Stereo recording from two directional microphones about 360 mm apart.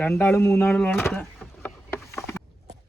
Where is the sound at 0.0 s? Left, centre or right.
Centre.